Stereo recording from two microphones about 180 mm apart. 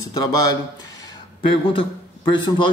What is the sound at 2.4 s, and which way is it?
Speech, 25° left (ahead or behind).